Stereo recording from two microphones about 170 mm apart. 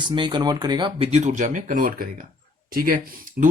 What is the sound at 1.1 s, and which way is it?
Speech, 45° right (ahead or behind).